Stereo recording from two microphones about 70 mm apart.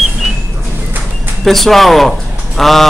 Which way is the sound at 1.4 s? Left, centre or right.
Centre.